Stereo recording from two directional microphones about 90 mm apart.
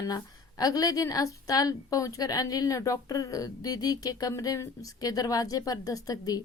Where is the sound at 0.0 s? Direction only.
45° left (ahead or behind).